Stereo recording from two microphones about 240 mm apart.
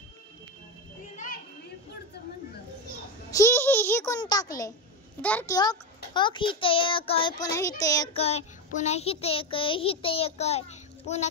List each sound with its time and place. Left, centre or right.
1.1 s children playing: left
3.3 s a sound: centre
5.2 s a child's voice: centre
6.1 s child singing: centre